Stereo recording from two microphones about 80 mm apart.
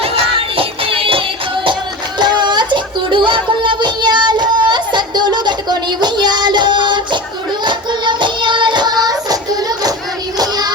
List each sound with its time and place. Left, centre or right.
2.1 s music: right